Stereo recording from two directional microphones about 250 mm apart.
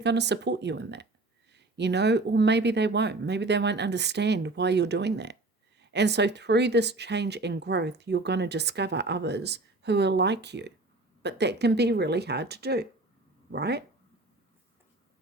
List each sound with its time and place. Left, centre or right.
0.0 s speech: right